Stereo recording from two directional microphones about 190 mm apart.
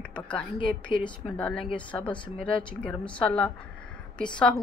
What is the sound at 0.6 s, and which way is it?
Speech, 25° left (ahead or behind).